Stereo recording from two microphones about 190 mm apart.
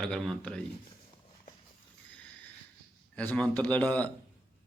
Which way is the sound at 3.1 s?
5° left (ahead or behind).